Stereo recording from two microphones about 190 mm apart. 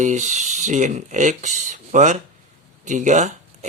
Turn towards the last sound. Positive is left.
turn(degrees=-40)  # may be behind; listen again after turning